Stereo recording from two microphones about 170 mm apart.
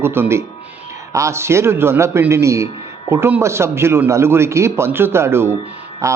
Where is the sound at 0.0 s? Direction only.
15° right (ahead or behind).